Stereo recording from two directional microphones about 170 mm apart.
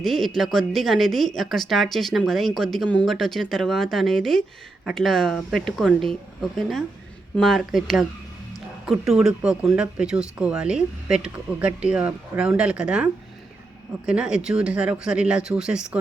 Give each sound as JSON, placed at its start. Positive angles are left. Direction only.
{"t": 0.0, "sound": "a woman's voice", "side_deg": 0}